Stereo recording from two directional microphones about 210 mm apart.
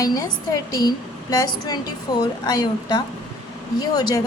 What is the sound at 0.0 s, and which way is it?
A woman's voice, 15° left (ahead or behind).